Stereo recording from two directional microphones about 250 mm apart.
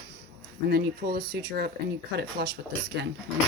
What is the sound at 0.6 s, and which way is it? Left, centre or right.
Speech, right.